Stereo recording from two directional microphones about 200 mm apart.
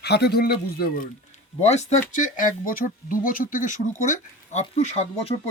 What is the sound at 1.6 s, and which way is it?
Speech, 35° left (ahead or behind).